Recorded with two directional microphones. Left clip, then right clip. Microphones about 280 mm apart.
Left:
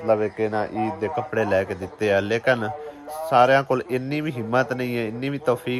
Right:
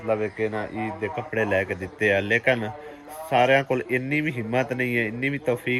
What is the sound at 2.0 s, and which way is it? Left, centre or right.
Speech, centre.